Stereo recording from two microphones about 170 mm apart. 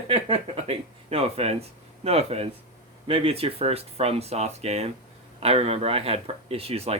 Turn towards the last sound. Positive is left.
turn(degrees=-35)  # may be behind; listen again after turning